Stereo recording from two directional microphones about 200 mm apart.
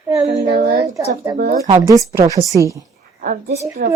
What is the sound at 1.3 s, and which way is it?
Speech, 40° right (ahead or behind).